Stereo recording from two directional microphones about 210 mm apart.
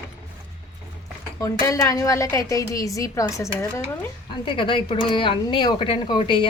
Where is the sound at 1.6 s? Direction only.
15° left (ahead or behind).